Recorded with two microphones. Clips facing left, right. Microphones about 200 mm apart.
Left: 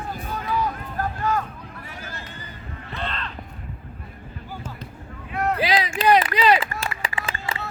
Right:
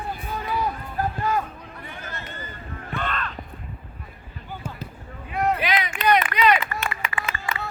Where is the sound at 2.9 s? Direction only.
30° left (ahead or behind).